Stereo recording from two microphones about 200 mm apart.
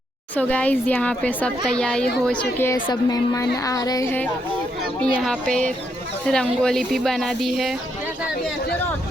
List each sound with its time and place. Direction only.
0.3 s a child's voice: 5° left (ahead or behind)